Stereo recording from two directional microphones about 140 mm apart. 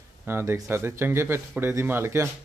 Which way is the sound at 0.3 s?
15° right (ahead or behind).